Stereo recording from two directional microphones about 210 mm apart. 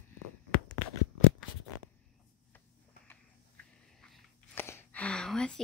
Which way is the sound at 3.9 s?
Centre (ahead or behind).